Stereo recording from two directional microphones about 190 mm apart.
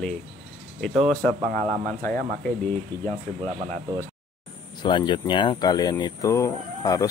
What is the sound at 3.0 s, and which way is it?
Speech, 40° right (ahead or behind).